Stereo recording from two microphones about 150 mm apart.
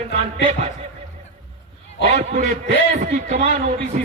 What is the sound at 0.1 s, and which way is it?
Speech, 50° right (ahead or behind).